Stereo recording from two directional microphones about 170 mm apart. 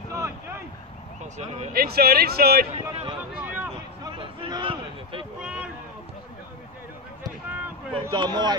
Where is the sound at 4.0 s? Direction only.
30° right (ahead or behind).